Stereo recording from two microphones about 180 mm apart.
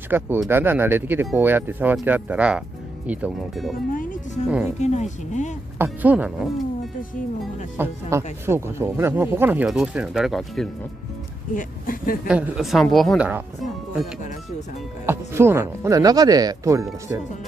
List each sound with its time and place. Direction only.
0.1 s a woman's voice: 10° right (ahead or behind)
3.9 s music: 50° left (ahead or behind)
4.7 s speech: 40° left (ahead or behind)
5.8 s speech: 10° right (ahead or behind)
7.7 s speech: 10° right (ahead or behind)
11.5 s speech: 50° left (ahead or behind)
12.3 s a woman's voice: 5° right (ahead or behind)
15.0 s speech: 15° right (ahead or behind)